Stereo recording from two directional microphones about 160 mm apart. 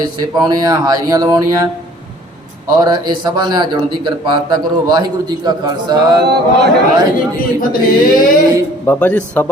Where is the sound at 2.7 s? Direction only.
25° right (ahead or behind).